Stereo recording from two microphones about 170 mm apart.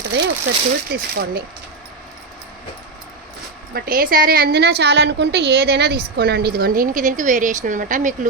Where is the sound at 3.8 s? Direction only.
55° right (ahead or behind).